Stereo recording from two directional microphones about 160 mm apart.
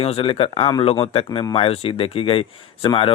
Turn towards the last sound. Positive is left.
turn(degrees=35)  # may be behind; listen again after turning